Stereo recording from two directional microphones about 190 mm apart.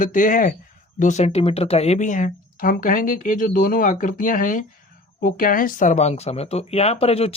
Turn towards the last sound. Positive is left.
turn(degrees=30)  # may be behind; listen again after turning